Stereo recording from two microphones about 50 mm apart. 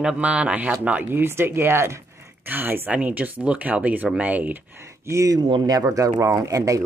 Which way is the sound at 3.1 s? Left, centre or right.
Right.